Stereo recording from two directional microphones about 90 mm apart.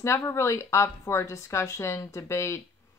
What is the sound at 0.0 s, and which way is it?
Speech, 30° left (ahead or behind).